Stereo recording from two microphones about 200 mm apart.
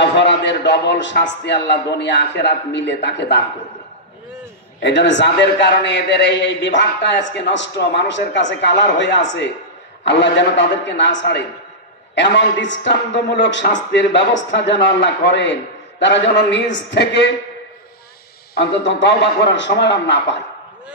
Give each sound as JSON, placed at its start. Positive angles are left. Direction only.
{"t": 0.0, "sound": "a man's voice", "side_deg": 60}
{"t": 4.8, "sound": "a man's voice", "side_deg": 65}
{"t": 18.5, "sound": "a man's voice", "side_deg": 60}